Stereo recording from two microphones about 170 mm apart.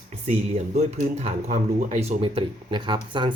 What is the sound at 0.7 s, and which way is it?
Speech, 40° right (ahead or behind).